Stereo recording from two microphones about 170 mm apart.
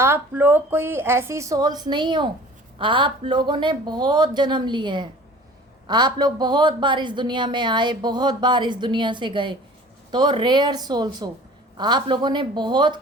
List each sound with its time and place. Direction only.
0.0 s a woman's voice: 15° right (ahead or behind)